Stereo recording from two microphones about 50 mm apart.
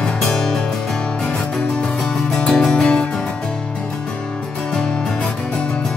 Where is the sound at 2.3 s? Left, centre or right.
Centre.